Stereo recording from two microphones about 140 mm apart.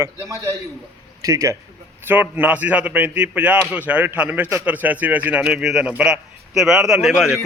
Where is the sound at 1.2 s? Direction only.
20° right (ahead or behind).